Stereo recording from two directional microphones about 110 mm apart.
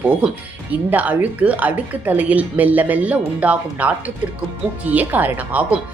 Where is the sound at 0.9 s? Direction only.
15° right (ahead or behind).